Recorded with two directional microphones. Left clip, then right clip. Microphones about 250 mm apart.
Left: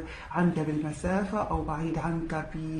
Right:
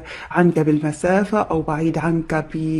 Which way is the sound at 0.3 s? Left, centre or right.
Right.